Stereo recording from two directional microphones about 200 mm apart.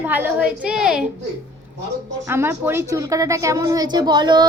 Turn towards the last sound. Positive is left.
turn(degrees=-20)  # may be behind; listen again after turning